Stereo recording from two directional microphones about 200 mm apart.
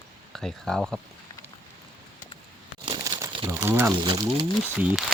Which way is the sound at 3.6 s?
10° right (ahead or behind).